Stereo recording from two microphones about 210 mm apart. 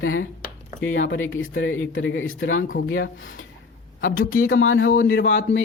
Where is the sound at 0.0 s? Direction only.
70° left (ahead or behind).